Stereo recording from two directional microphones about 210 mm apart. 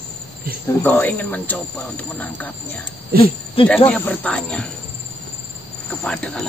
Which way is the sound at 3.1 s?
45° right (ahead or behind).